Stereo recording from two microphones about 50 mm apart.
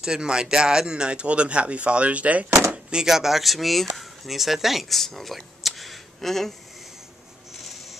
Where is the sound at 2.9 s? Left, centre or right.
Centre.